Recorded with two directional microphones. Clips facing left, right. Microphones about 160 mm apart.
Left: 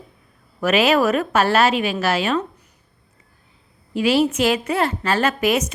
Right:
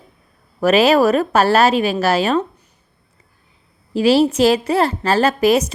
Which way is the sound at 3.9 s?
35° right (ahead or behind).